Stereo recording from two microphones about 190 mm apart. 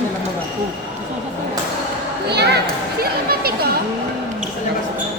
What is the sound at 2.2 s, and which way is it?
Speech, 60° right (ahead or behind).